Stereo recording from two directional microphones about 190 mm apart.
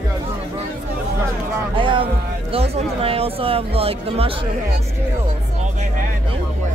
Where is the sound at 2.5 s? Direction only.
30° right (ahead or behind).